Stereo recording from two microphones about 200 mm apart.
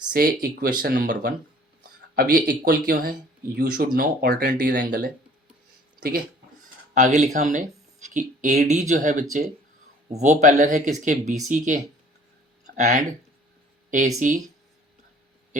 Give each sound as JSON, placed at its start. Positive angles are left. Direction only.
{"t": 0.1, "sound": "speech", "side_deg": -50}
{"t": 6.9, "sound": "speech", "side_deg": -35}
{"t": 14.2, "sound": "speech", "side_deg": -40}